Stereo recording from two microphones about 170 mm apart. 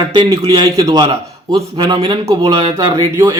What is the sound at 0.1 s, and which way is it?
Speech, 25° right (ahead or behind).